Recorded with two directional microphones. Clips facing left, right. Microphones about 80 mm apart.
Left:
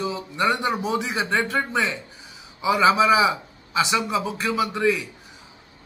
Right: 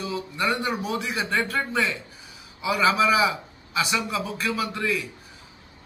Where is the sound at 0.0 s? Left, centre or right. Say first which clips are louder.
Left 3 dB; left.